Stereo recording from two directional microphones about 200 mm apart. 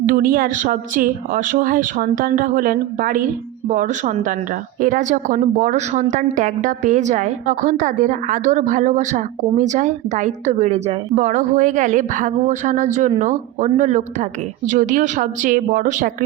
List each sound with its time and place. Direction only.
0.0 s a woman's voice: 45° right (ahead or behind)